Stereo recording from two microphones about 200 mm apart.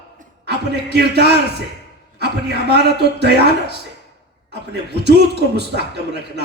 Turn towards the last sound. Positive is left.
turn(degrees=-55)  # may be behind; listen again after turning